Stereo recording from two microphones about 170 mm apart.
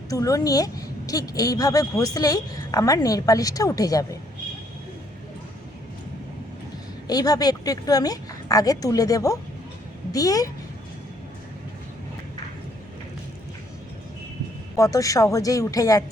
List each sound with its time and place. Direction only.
0.1 s a woman's voice: 20° left (ahead or behind)
7.1 s a woman's voice: 20° left (ahead or behind)
14.8 s a woman's voice: 20° left (ahead or behind)